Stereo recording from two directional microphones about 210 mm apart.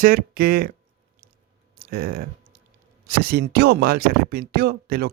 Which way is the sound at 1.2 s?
40° right (ahead or behind).